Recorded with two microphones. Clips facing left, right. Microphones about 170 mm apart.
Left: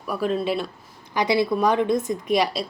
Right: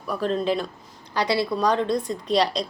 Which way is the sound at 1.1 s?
20° left (ahead or behind).